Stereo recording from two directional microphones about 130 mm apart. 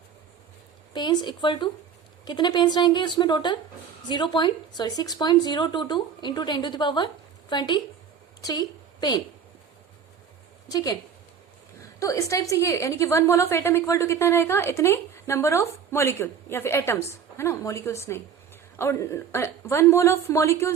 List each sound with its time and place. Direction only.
0.9 s a woman's voice: 35° left (ahead or behind)
10.7 s a woman's voice: 30° left (ahead or behind)